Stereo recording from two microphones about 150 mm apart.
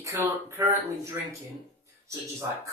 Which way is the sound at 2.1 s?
20° right (ahead or behind).